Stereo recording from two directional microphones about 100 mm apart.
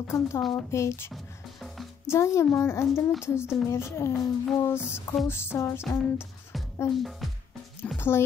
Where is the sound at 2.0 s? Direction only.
30° left (ahead or behind).